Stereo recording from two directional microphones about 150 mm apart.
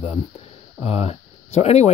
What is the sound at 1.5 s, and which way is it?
Speech, 45° left (ahead or behind).